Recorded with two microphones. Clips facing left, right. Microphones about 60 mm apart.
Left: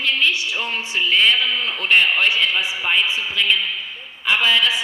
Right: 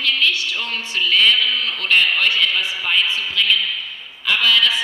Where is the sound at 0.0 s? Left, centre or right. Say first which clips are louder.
Even; left.